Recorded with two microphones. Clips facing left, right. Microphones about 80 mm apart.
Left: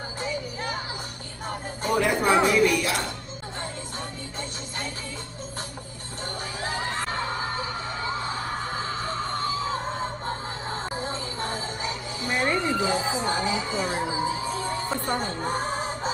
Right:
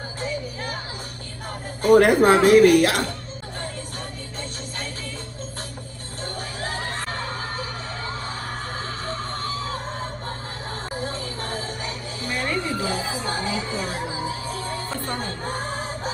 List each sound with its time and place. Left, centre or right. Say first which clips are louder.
0.2 s music: right 2 dB; left
2.0 s a woman's voice: right 5 dB; right
6.2 s a sound: right 1 dB; left